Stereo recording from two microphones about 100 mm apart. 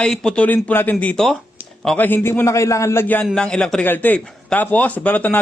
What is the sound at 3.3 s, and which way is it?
A man's voice, 10° left (ahead or behind).